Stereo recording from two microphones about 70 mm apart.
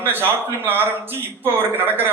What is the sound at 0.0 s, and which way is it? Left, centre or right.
A man's voice, right.